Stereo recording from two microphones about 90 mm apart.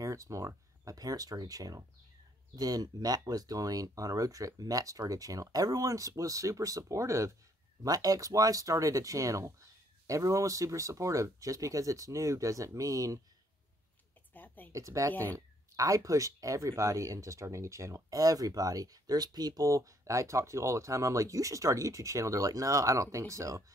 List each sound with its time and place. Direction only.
0.0 s speech: 35° right (ahead or behind)
14.3 s a sound: 20° left (ahead or behind)
14.7 s speech: 35° right (ahead or behind)